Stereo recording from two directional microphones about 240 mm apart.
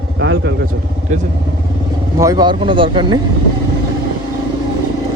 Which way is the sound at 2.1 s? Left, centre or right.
Centre.